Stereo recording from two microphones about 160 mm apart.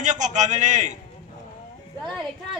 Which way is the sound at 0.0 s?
50° right (ahead or behind).